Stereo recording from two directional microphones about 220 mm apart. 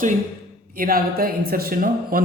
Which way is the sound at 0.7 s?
40° right (ahead or behind).